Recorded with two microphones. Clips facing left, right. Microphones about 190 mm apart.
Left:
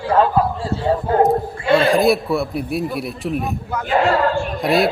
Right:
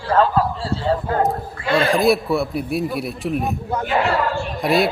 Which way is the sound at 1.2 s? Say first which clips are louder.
Left 5 dB; centre (ahead or behind).